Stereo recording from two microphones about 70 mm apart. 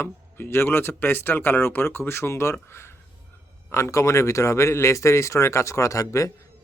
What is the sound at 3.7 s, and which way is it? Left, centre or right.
A man's voice, left.